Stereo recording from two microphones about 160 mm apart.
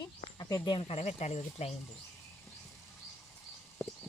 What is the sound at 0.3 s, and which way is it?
Speech, 25° left (ahead or behind).